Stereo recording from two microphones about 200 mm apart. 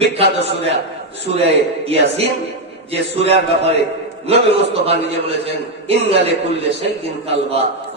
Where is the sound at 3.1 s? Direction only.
60° left (ahead or behind).